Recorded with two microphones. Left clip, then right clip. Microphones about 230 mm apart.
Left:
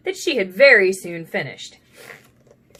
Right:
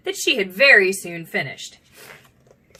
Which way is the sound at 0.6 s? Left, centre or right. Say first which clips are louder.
Left 1 dB; centre.